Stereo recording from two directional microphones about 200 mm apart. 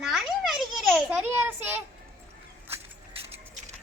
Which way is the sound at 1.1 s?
10° right (ahead or behind).